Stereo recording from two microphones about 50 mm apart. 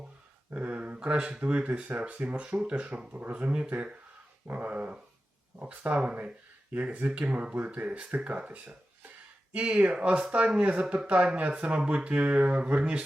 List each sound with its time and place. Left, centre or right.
0.5 s speech: right
4.4 s dog: right
5.5 s speech: right